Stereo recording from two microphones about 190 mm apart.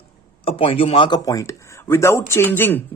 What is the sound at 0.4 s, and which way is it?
Speech, 30° left (ahead or behind).